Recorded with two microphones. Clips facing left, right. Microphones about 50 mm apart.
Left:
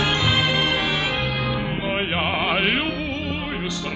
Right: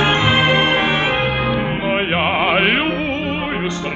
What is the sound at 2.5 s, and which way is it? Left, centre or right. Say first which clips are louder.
Music: right 6 dB; right.